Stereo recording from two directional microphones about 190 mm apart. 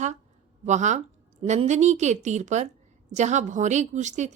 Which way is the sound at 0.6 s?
40° right (ahead or behind).